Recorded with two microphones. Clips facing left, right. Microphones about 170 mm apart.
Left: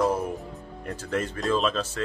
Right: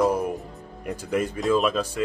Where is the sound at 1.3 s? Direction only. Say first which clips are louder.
Right 4 dB; centre (ahead or behind).